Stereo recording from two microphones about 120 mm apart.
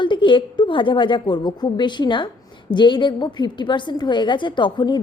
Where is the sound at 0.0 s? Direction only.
40° left (ahead or behind).